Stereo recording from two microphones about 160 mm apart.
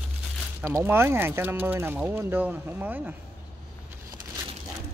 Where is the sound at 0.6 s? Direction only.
15° right (ahead or behind).